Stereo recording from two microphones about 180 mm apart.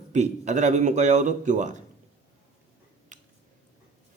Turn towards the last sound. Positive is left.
turn(degrees=-45)  # may be behind; listen again after turning